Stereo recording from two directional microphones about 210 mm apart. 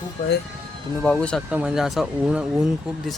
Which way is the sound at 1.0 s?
5° left (ahead or behind).